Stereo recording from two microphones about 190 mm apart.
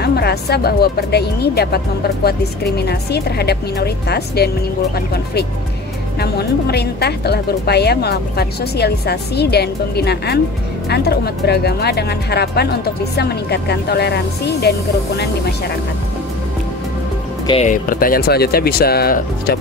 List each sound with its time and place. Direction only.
0.0 s speech: 60° left (ahead or behind)
17.5 s speech: 40° left (ahead or behind)